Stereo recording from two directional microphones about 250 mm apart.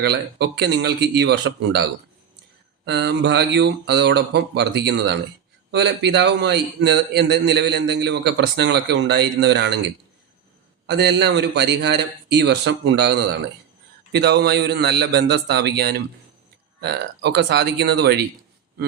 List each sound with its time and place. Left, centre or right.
0.0 s a man's voice: right
10.8 s a man's voice: right
14.2 s a man's voice: right